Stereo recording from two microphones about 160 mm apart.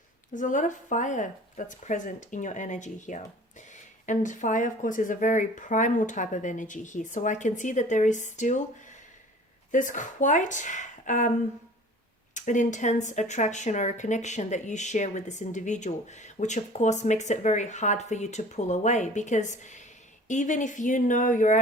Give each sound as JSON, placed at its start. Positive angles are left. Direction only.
{"t": 0.3, "sound": "speech", "side_deg": 50}
{"t": 9.7, "sound": "speech", "side_deg": 50}